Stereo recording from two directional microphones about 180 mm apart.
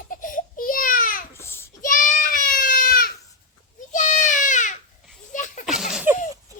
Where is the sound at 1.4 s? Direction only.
15° left (ahead or behind).